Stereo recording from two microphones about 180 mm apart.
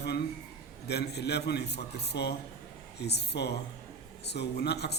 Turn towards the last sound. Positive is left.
turn(degrees=65)  # may be behind; listen again after turning